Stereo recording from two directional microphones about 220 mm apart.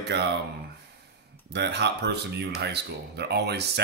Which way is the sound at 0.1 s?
50° right (ahead or behind).